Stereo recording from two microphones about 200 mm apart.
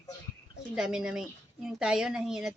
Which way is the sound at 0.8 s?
5° right (ahead or behind).